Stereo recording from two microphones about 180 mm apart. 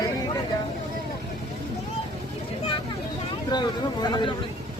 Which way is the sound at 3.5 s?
25° left (ahead or behind).